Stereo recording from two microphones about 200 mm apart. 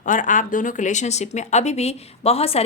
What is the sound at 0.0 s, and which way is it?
A woman's voice, 40° left (ahead or behind).